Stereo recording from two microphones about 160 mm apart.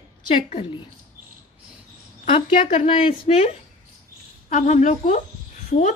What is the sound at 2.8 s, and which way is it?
Speech, 35° left (ahead or behind).